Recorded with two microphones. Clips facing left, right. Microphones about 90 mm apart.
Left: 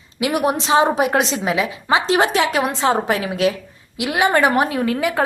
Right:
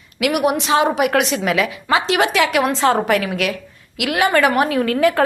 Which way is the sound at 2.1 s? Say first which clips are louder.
Left 1 dB; 35° left (ahead or behind).